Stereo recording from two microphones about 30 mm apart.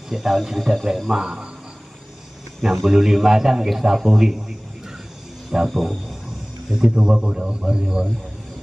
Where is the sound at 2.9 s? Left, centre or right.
Centre.